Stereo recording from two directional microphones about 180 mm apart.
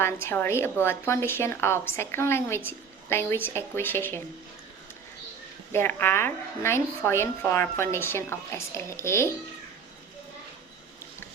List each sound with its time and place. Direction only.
0.0 s a woman's voice: 15° left (ahead or behind)
5.7 s a woman's voice: 10° left (ahead or behind)